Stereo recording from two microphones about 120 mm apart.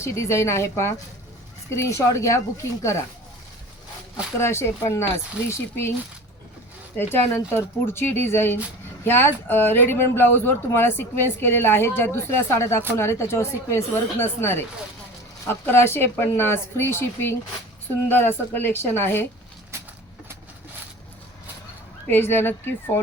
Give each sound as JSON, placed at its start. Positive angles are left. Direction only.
{"t": 0.0, "sound": "speech", "side_deg": 25}
{"t": 4.4, "sound": "speech", "side_deg": 20}
{"t": 6.9, "sound": "speech", "side_deg": 20}
{"t": 22.0, "sound": "speech", "side_deg": 15}